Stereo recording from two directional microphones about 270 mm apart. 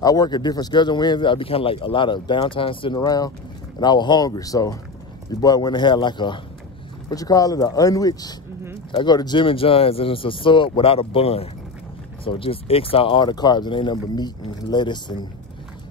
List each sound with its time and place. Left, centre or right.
0.0 s speech: centre